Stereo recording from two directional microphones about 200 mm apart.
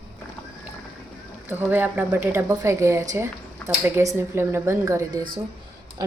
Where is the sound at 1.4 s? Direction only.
10° right (ahead or behind).